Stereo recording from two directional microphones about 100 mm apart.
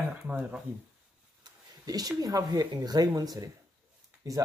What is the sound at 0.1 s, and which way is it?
Speech, 15° right (ahead or behind).